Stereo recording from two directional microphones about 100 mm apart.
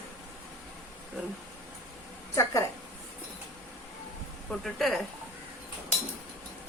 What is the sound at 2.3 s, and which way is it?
Speech, 30° left (ahead or behind).